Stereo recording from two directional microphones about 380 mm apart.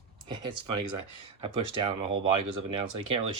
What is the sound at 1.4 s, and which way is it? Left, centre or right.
Speech, centre.